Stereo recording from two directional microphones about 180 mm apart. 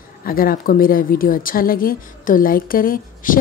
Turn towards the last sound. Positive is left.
turn(degrees=50)  # may be behind; listen again after turning